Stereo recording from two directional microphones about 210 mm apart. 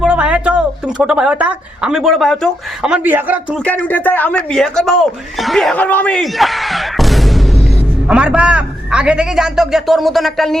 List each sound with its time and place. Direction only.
0.0 s a woman's voice: 5° right (ahead or behind)
3.6 s a woman's voice: 5° left (ahead or behind)